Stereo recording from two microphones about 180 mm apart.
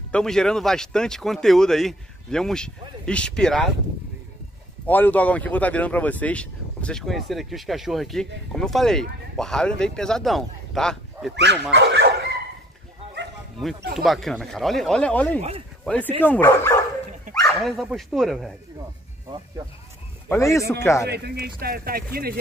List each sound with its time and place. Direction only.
0.1 s speech: 5° left (ahead or behind)
4.8 s speech: 10° left (ahead or behind)
11.7 s speech: 65° right (ahead or behind)
13.6 s speech: centre (ahead or behind)
17.6 s speech: centre (ahead or behind)
20.2 s speech: 15° left (ahead or behind)
21.1 s speech: 60° right (ahead or behind)